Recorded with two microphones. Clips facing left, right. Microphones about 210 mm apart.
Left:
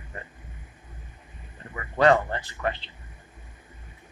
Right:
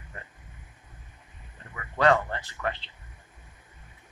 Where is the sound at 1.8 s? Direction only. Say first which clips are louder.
Left 3 dB; 15° left (ahead or behind).